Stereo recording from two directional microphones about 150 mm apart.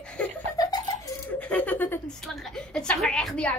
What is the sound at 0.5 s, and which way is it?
Giggle, 25° left (ahead or behind).